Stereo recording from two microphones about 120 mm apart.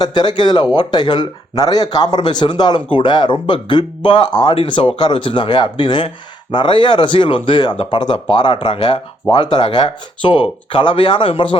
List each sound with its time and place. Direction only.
0.0 s speech: 35° left (ahead or behind)